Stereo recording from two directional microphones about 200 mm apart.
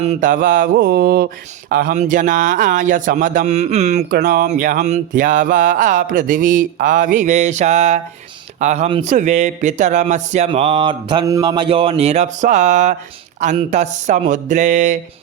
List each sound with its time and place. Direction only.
0.0 s mantra: 35° right (ahead or behind)
1.7 s speech: 40° right (ahead or behind)